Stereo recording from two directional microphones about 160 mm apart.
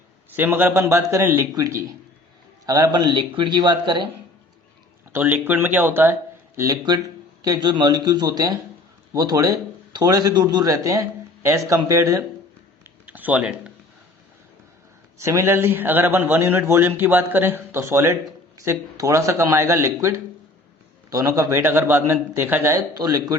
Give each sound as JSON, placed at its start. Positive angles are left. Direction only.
{"t": 0.3, "sound": "a man's voice", "side_deg": -10}
{"t": 5.1, "sound": "a man's voice", "side_deg": -10}
{"t": 6.6, "sound": "a man's voice", "side_deg": -25}
{"t": 12.8, "sound": "a sound", "side_deg": -10}
{"t": 15.2, "sound": "a man's voice", "side_deg": -15}